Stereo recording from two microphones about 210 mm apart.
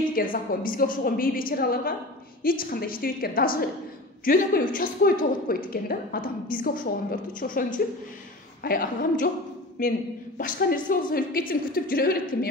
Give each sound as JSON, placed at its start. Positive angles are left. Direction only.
{"t": 0.1, "sound": "a woman's voice", "side_deg": 40}